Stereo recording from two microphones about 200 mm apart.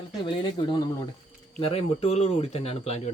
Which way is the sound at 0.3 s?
25° left (ahead or behind).